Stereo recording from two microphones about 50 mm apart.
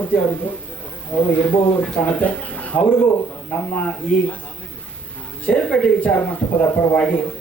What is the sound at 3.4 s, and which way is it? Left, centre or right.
Speech, left.